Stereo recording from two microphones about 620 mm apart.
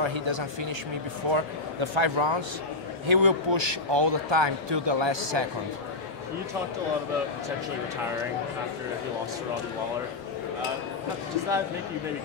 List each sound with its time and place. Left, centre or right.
0.0 s a man's voice: right